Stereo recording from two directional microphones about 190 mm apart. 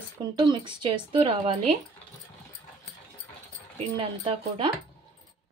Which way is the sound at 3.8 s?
25° right (ahead or behind).